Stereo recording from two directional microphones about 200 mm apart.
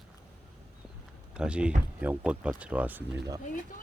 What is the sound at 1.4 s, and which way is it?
Speech, 5° right (ahead or behind).